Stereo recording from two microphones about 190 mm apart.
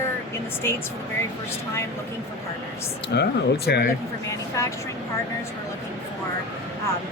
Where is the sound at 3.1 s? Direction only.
60° left (ahead or behind).